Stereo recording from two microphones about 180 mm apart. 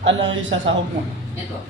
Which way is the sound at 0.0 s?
90° right.